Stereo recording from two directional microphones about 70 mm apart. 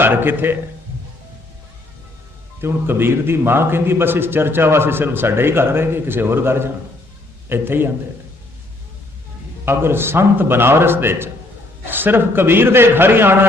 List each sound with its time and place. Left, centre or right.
0.0 s a man's voice: right
2.6 s a man's voice: right
9.6 s a man's voice: right